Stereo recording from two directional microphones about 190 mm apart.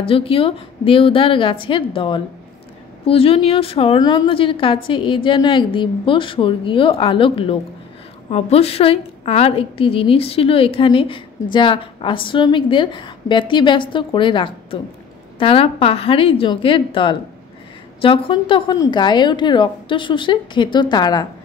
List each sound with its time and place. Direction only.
0.0 s a woman's voice: 30° left (ahead or behind)